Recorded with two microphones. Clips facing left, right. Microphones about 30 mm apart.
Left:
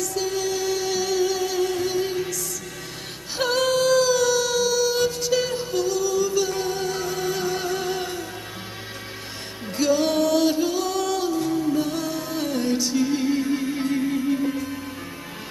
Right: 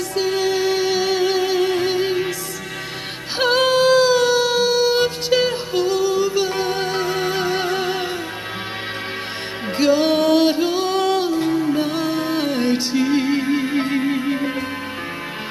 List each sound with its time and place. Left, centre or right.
0.1 s music: right
3.3 s music: right
9.8 s music: right